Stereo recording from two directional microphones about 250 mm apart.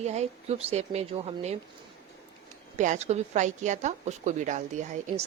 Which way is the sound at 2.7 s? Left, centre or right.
Right.